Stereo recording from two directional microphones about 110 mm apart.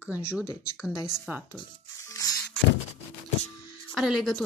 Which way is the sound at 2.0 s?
30° left (ahead or behind).